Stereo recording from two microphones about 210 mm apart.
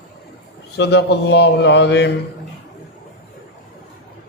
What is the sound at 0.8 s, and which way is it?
A man's voice, 55° left (ahead or behind).